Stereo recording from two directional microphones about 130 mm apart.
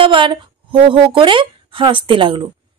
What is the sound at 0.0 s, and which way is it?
A woman's voice, 40° right (ahead or behind).